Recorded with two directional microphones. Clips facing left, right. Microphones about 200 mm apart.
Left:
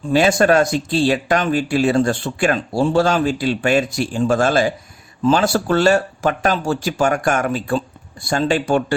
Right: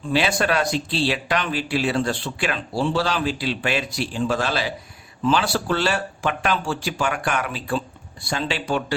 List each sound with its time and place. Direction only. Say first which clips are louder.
0.1 s speech: left 7 dB; 45° left (ahead or behind)